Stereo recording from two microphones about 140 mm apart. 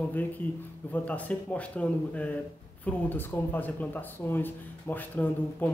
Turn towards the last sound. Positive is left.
turn(degrees=10)  # may be behind; listen again after turning